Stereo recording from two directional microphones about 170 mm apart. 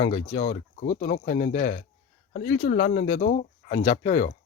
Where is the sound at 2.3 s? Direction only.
60° left (ahead or behind).